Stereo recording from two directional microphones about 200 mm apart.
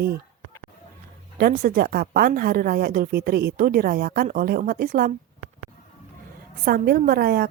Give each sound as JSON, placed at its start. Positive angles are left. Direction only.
{"t": 1.4, "sound": "speech", "side_deg": -45}
{"t": 6.7, "sound": "speech", "side_deg": -50}